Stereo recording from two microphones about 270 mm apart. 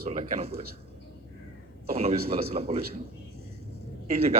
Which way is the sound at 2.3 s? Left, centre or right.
Right.